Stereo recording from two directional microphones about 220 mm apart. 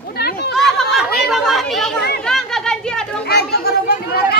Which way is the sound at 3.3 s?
45° left (ahead or behind).